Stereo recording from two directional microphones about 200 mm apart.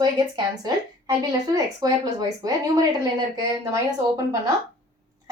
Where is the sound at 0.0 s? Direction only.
20° right (ahead or behind).